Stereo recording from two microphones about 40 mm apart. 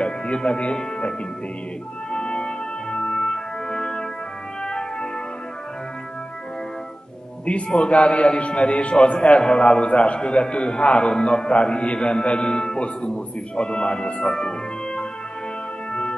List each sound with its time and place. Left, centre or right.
0.0 s speech: left
2.1 s music: centre
7.4 s a man's voice: left
15.9 s music: left